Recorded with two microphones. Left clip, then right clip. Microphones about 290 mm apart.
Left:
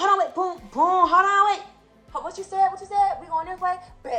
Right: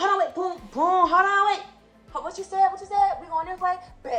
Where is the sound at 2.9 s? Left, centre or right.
Centre.